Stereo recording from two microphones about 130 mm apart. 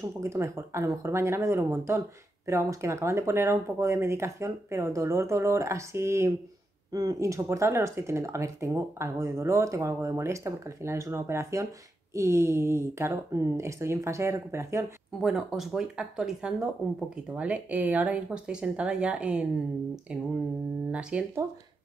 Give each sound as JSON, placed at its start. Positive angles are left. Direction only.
{"t": 0.0, "sound": "speech", "side_deg": -20}
{"t": 15.1, "sound": "speech", "side_deg": 0}
{"t": 20.9, "sound": "speech", "side_deg": -10}